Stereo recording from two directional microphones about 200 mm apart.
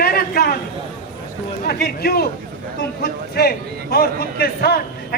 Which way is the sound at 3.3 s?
50° left (ahead or behind).